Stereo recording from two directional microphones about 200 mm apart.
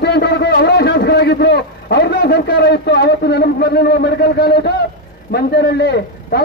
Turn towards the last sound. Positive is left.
turn(degrees=55)  # may be behind; listen again after turning